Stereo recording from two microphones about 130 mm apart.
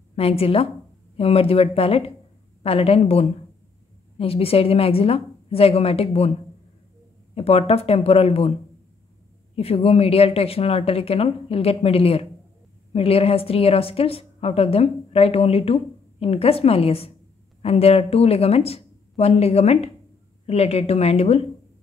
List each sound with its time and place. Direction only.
0.1 s a woman's voice: 50° left (ahead or behind)
7.3 s a woman's voice: 50° left (ahead or behind)
9.6 s a woman's voice: 50° left (ahead or behind)